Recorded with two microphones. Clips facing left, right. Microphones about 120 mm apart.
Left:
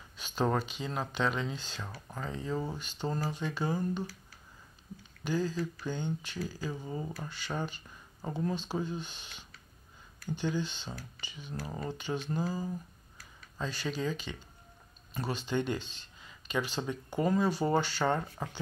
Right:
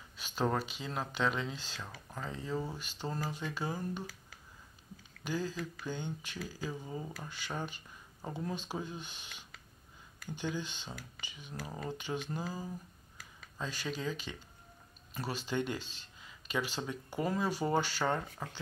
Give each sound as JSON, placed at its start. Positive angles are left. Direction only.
{"t": 0.2, "sound": "speech", "side_deg": -5}
{"t": 2.5, "sound": "speech", "side_deg": 15}
{"t": 2.8, "sound": "speech", "side_deg": -5}
{"t": 5.2, "sound": "speech", "side_deg": -10}
{"t": 6.7, "sound": "speech", "side_deg": 5}
{"t": 7.2, "sound": "speech", "side_deg": -10}
{"t": 13.6, "sound": "speech", "side_deg": -10}
{"t": 18.4, "sound": "speech", "side_deg": 20}